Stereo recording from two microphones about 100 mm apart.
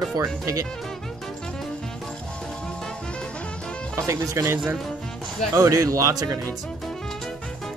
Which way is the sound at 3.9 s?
30° right (ahead or behind).